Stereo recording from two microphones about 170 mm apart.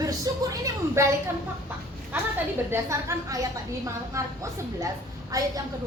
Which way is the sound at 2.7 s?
15° right (ahead or behind).